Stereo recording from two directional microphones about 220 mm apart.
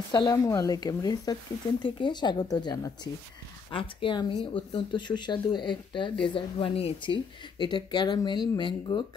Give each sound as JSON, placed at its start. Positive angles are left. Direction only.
{"t": 0.1, "sound": "speech", "side_deg": 15}